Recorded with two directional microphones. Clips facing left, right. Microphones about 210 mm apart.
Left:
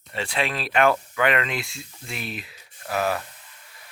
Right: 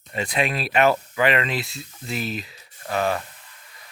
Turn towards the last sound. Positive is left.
turn(degrees=5)  # may be behind; listen again after turning